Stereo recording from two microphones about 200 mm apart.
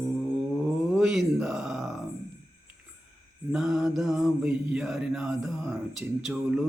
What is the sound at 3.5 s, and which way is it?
Mantra, centre (ahead or behind).